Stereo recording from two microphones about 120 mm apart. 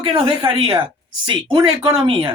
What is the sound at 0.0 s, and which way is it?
A woman's voice, 45° right (ahead or behind).